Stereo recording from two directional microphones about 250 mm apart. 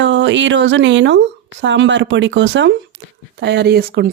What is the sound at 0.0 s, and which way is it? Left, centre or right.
Speech, right.